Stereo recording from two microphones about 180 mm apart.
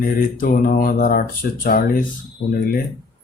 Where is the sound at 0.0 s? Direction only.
50° left (ahead or behind).